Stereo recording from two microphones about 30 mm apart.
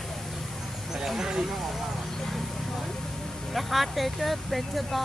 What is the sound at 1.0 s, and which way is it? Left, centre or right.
Speech, centre.